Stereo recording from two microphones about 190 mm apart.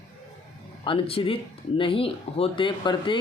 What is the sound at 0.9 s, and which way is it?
Speech, 30° left (ahead or behind).